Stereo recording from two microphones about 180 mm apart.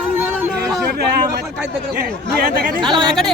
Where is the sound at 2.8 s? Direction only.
25° right (ahead or behind).